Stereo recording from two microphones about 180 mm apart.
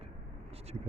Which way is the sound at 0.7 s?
35° right (ahead or behind).